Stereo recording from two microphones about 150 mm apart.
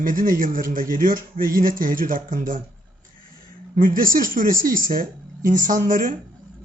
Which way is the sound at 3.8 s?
65° right (ahead or behind).